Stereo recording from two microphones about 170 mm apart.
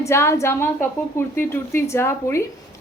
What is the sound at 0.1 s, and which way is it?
A woman's voice, 15° left (ahead or behind).